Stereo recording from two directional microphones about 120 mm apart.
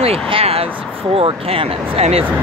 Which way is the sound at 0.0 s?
55° right (ahead or behind).